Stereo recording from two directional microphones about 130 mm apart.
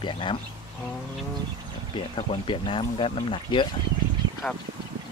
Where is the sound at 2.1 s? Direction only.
45° left (ahead or behind).